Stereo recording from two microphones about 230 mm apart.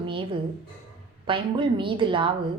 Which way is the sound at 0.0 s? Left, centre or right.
Right.